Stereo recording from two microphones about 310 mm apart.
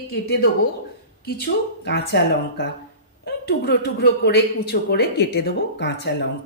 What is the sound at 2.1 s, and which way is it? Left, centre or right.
Speech, left.